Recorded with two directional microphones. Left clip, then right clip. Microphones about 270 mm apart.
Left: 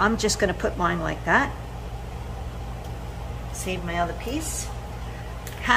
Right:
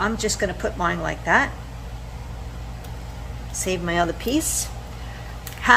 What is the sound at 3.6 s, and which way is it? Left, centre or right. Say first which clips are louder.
Speech: right 5 dB; right.